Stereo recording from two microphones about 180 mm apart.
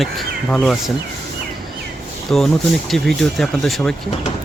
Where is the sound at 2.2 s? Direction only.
Centre (ahead or behind).